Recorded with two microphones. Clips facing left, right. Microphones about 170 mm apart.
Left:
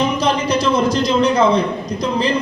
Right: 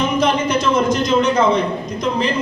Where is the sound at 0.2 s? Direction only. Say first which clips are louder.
Even; 35° left (ahead or behind).